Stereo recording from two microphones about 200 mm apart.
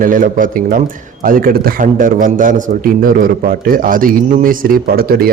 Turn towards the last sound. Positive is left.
turn(degrees=-50)  # may be behind; listen again after turning